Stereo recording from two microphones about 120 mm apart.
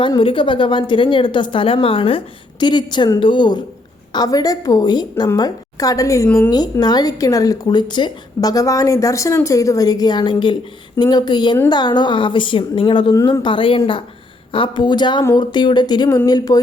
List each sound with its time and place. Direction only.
0.0 s a woman's voice: 45° left (ahead or behind); by 6.2 s 30° left (ahead or behind)
6.2 s a woman's voice: 15° left (ahead or behind)
6.5 s a woman's voice: 35° left (ahead or behind)